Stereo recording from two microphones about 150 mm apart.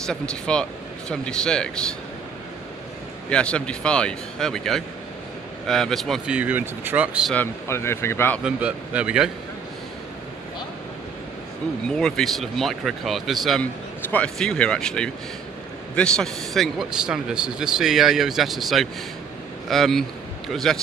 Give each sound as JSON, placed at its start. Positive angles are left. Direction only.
{"t": 0.0, "sound": "a man's voice", "side_deg": 5}
{"t": 3.3, "sound": "a man's voice", "side_deg": 5}
{"t": 7.3, "sound": "a man's voice", "side_deg": 15}
{"t": 8.5, "sound": "a man's voice", "side_deg": -10}
{"t": 11.9, "sound": "a man's voice", "side_deg": 0}